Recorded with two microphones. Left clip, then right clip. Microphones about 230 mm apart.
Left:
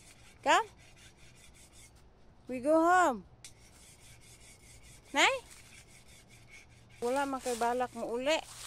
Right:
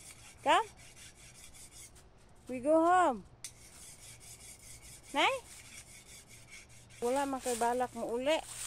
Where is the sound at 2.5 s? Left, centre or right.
Centre.